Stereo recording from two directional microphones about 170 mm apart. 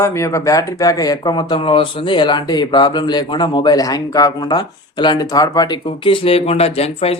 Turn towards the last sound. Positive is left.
turn(degrees=35)  # may be behind; listen again after turning